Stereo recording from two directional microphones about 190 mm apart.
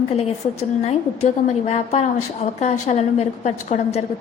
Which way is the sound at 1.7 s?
35° left (ahead or behind).